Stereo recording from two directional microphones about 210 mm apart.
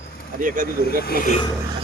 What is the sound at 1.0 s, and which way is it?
Speech, 45° left (ahead or behind).